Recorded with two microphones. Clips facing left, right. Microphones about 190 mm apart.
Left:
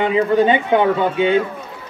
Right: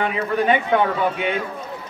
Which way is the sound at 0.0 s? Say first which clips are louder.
Left 6 dB; 25° left (ahead or behind).